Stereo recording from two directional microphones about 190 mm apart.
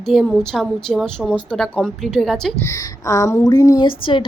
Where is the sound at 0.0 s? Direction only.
Centre (ahead or behind).